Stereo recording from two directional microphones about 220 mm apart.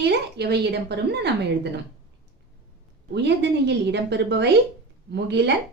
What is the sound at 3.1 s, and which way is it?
A woman's voice, 50° right (ahead or behind).